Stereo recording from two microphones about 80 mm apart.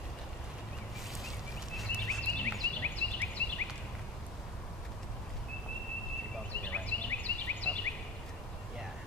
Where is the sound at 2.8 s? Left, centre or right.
Left.